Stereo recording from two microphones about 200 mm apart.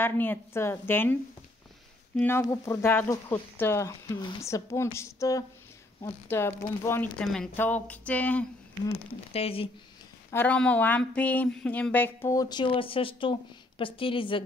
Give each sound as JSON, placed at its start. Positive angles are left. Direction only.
{"t": 0.0, "sound": "speech", "side_deg": 10}
{"t": 2.1, "sound": "speech", "side_deg": 10}
{"t": 8.8, "sound": "speech", "side_deg": 30}
{"t": 10.3, "sound": "speech", "side_deg": 10}